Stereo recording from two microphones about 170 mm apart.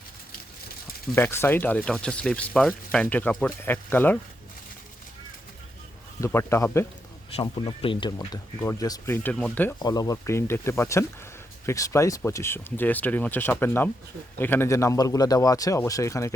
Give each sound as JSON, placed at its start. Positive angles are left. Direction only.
{"t": 1.1, "sound": "speech", "side_deg": 15}
{"t": 6.1, "sound": "speech", "side_deg": 15}
{"t": 7.4, "sound": "a man's voice", "side_deg": 30}
{"t": 9.7, "sound": "a man's voice", "side_deg": 25}